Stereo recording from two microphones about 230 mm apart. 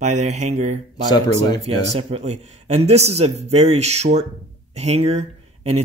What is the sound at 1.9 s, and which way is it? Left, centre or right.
Speech, right.